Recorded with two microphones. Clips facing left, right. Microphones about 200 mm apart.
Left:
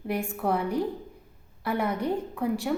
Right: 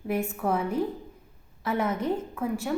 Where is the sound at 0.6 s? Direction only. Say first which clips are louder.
Even; 75° left (ahead or behind).